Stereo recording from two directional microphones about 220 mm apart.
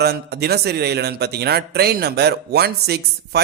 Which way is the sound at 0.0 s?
50° right (ahead or behind).